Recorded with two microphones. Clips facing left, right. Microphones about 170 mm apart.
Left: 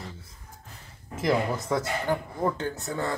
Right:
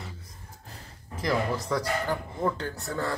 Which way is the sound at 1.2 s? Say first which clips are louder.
Left 2 dB; 25° left (ahead or behind).